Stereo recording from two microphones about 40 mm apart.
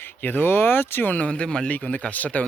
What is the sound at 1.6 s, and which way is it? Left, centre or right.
Speech, left.